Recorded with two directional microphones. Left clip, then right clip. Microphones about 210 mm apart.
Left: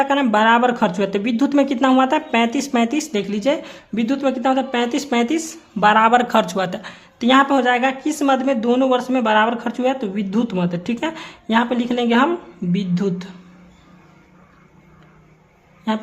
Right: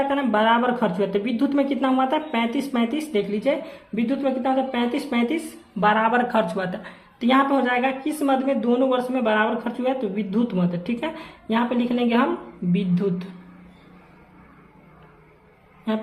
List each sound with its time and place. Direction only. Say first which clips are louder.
0.1 s speech: left 5 dB; 35° left (ahead or behind)